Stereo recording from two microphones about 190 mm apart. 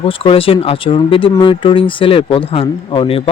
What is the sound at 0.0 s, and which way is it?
Speech, 30° left (ahead or behind).